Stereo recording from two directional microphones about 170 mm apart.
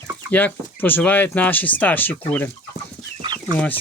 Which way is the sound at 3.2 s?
25° right (ahead or behind).